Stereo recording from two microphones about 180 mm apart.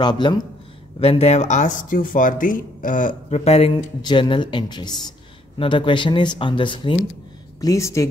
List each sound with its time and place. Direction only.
0.0 s speech: 25° left (ahead or behind)